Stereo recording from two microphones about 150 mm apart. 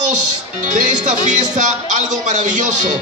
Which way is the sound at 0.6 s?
55° right (ahead or behind).